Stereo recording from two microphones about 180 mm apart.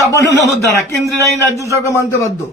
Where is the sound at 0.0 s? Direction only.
15° left (ahead or behind).